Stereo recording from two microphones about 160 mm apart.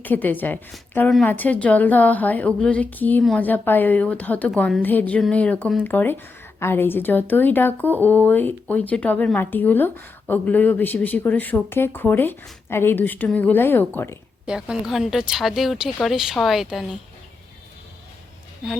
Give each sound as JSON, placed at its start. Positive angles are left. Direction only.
{"t": 0.0, "sound": "a woman's voice", "side_deg": 10}
{"t": 14.4, "sound": "speech", "side_deg": -5}